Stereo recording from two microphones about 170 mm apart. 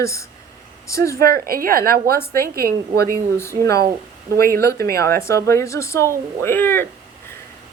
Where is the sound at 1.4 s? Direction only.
60° right (ahead or behind).